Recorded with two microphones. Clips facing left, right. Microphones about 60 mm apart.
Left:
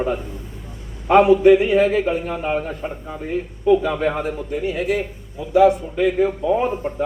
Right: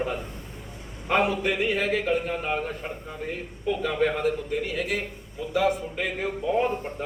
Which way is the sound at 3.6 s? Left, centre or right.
Centre.